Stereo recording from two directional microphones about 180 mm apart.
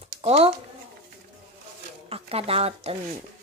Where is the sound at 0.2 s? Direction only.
35° right (ahead or behind).